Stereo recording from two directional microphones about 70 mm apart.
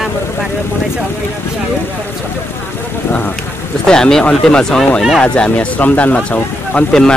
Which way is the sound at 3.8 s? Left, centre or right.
Centre.